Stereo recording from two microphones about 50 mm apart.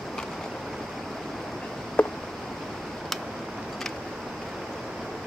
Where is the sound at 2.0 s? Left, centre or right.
Left.